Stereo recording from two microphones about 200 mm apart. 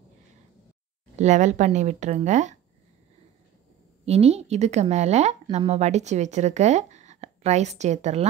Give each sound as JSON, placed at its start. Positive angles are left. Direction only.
{"t": 1.1, "sound": "a woman's voice", "side_deg": -35}
{"t": 4.0, "sound": "a woman's voice", "side_deg": -30}